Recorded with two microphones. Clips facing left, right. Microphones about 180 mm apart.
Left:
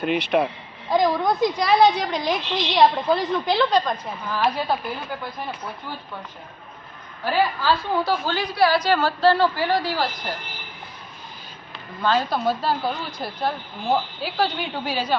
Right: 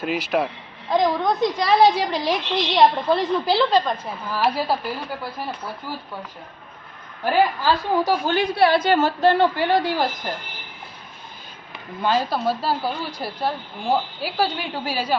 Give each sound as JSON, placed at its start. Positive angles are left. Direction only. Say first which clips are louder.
{"t": 0.0, "sound": "a woman's voice", "louder": "left 2 dB", "side_deg": 0}
{"t": 7.3, "sound": "a woman's voice", "louder": "right 2 dB", "side_deg": -15}
{"t": 12.0, "sound": "a woman's voice", "louder": "even", "side_deg": -5}